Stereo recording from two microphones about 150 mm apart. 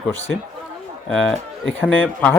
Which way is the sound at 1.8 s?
10° left (ahead or behind).